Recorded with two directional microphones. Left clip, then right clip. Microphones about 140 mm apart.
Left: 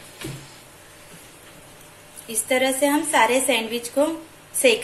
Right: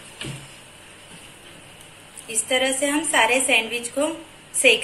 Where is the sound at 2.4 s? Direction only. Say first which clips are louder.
Left 2 dB; 40° left (ahead or behind).